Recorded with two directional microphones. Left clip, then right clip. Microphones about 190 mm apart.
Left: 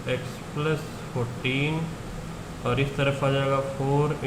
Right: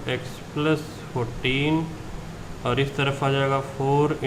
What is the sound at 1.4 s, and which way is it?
Speech, 35° right (ahead or behind).